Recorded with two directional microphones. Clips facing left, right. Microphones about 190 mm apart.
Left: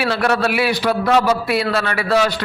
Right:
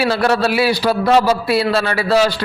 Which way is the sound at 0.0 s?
30° right (ahead or behind).